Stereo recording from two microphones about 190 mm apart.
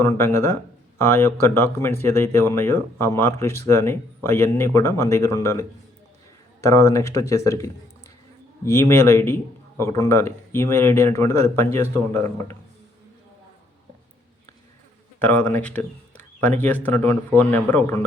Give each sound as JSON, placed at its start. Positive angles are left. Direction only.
{"t": 0.0, "sound": "speech", "side_deg": 15}
{"t": 15.2, "sound": "speech", "side_deg": 10}